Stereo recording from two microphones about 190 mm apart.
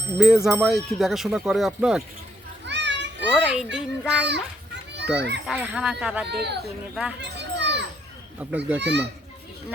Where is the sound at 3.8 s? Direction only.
5° right (ahead or behind).